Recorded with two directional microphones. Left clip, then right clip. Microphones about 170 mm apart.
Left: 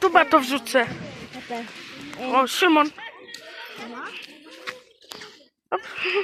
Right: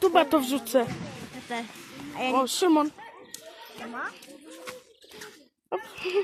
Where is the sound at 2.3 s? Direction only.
15° left (ahead or behind).